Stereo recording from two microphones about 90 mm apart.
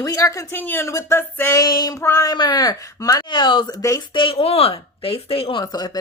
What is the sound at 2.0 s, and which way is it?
Speech, 30° left (ahead or behind).